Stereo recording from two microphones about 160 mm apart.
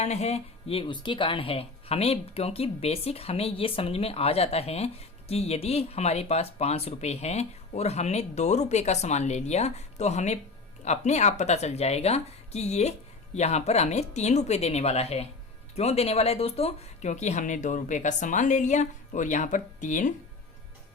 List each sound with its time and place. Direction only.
0.0 s speech: 45° left (ahead or behind)